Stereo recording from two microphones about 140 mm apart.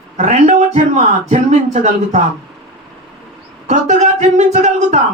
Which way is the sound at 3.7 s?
55° right (ahead or behind).